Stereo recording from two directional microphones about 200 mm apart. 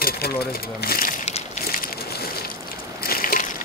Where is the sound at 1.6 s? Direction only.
45° left (ahead or behind).